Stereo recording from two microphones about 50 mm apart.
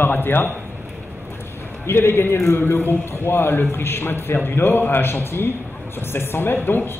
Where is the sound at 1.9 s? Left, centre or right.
Left.